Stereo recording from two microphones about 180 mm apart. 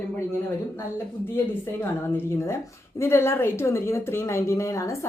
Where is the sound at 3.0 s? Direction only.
15° left (ahead or behind).